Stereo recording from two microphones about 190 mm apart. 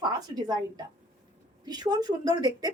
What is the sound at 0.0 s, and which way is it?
Speech, 20° right (ahead or behind).